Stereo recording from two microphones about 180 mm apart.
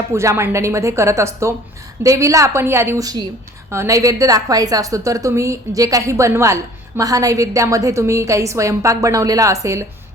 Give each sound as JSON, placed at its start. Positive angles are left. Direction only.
{"t": 0.1, "sound": "a woman's voice", "side_deg": -15}